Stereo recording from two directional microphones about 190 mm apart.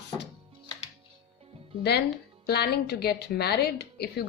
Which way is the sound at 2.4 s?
60° left (ahead or behind).